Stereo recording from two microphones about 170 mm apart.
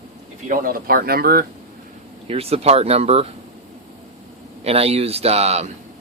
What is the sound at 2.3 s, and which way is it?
Speech, 35° right (ahead or behind).